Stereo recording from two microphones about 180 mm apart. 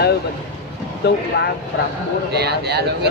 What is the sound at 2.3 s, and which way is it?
Speech, 65° right (ahead or behind).